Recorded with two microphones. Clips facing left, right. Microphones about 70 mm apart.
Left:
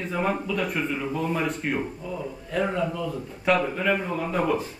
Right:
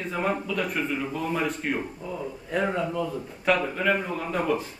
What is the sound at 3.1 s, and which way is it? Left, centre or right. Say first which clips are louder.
A man's voice: left 1 dB; centre.